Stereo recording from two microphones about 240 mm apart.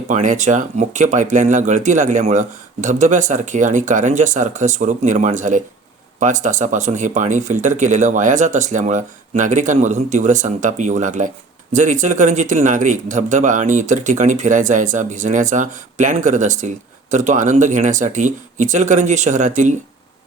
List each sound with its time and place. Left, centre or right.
0.1 s speech: right